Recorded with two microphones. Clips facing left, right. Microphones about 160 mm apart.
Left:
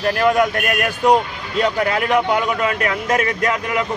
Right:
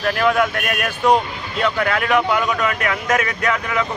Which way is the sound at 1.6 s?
35° left (ahead or behind).